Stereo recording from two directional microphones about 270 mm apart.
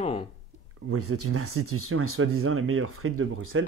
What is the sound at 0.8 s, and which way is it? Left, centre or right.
Speech, right.